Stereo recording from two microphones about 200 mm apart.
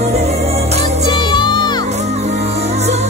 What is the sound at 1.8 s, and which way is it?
Music, 35° right (ahead or behind).